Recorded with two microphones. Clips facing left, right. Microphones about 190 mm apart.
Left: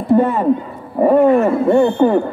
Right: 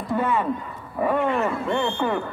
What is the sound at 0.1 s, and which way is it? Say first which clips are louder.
A woman's voice: left 10 dB; 40° left (ahead or behind).